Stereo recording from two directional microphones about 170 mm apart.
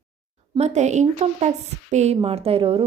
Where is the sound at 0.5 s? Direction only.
40° right (ahead or behind).